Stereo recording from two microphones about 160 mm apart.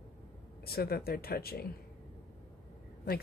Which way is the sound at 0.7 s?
70° left (ahead or behind).